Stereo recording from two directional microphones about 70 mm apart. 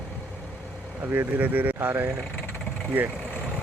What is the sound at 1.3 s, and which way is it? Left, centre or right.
Speech, right.